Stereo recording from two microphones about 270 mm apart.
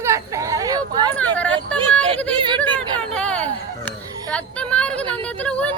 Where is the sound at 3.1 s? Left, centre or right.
Centre.